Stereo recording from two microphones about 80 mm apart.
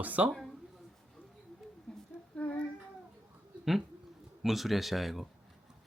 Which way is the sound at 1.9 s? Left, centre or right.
Centre.